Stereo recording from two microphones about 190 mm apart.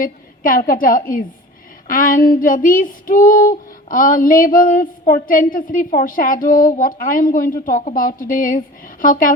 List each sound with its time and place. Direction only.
0.0 s child singing: 45° left (ahead or behind)